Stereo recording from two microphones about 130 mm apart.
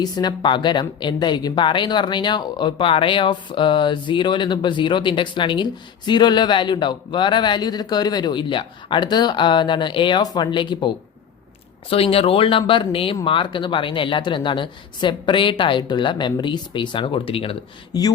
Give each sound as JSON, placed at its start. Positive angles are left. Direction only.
{"t": 0.0, "sound": "a woman's voice", "side_deg": 35}
{"t": 17.9, "sound": "a woman's voice", "side_deg": 30}